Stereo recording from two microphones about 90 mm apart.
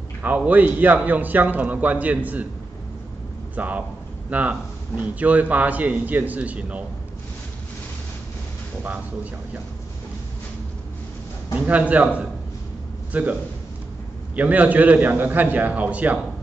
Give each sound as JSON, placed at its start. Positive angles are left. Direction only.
{"t": 0.2, "sound": "a man's voice", "side_deg": -20}
{"t": 3.5, "sound": "a man's voice", "side_deg": -15}
{"t": 8.8, "sound": "a man's voice", "side_deg": -20}
{"t": 11.5, "sound": "a man's voice", "side_deg": -15}